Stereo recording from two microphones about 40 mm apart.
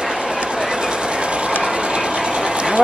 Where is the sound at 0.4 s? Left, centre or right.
Right.